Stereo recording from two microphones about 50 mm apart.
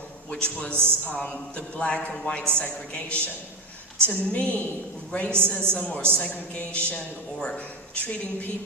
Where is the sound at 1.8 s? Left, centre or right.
Left.